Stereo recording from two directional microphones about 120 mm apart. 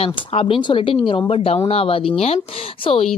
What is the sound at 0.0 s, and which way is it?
A woman's voice, 50° left (ahead or behind).